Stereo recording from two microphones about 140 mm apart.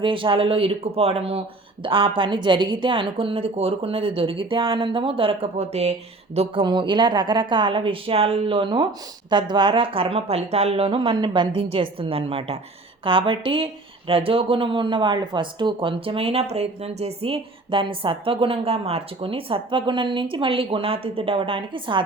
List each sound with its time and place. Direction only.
0.0 s speech: 40° right (ahead or behind)